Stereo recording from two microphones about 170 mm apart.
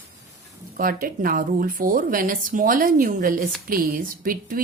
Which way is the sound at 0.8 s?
55° right (ahead or behind).